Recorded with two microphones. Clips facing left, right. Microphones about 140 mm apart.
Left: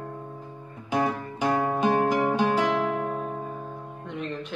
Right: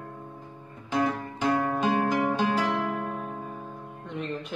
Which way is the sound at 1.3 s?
20° left (ahead or behind).